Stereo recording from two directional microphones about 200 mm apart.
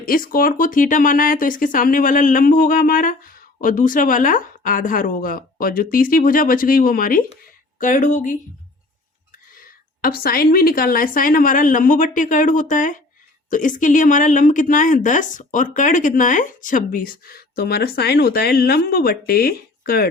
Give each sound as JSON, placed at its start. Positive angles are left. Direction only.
{"t": 0.0, "sound": "speech", "side_deg": 45}
{"t": 9.6, "sound": "speech", "side_deg": 45}